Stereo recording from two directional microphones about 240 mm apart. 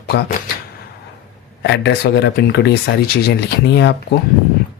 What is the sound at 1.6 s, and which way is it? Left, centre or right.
Speech, left.